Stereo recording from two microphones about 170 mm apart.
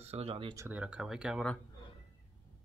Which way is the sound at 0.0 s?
35° right (ahead or behind).